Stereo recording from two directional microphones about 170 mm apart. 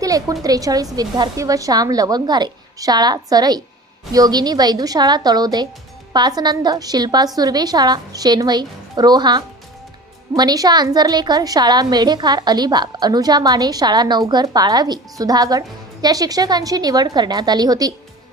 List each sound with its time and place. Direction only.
0.0 s a woman's voice: 20° right (ahead or behind)